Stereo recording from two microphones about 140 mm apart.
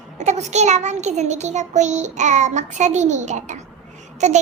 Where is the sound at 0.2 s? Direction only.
55° right (ahead or behind).